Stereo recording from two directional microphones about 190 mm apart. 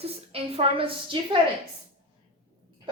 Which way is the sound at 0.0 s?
30° right (ahead or behind).